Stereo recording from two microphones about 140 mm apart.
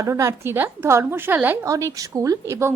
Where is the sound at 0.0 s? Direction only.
25° right (ahead or behind).